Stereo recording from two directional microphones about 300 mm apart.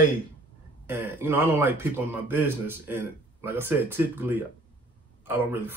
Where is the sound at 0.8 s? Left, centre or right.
Centre.